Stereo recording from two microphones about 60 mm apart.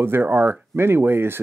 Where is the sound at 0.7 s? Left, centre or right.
Right.